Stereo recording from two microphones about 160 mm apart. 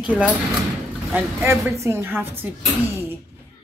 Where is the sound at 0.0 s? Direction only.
5° right (ahead or behind).